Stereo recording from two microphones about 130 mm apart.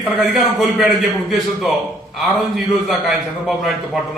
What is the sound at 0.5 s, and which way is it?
A man's voice, centre (ahead or behind).